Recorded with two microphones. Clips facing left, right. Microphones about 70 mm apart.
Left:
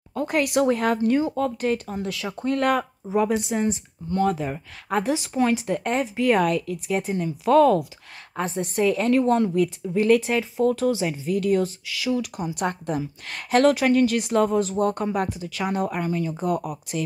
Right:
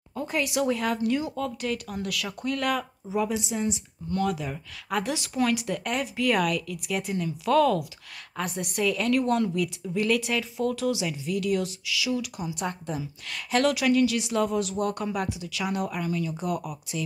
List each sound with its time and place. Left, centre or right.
0.1 s a woman's voice: left